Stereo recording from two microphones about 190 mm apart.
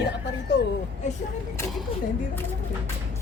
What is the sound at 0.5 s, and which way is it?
Speech, 70° left (ahead or behind).